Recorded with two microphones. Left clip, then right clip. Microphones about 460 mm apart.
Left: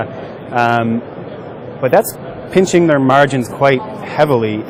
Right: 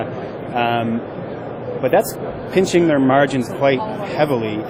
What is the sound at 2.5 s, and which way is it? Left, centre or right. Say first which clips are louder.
Speech: left 4 dB; left.